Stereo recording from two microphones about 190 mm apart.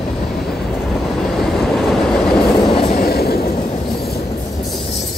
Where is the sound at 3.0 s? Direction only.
55° left (ahead or behind).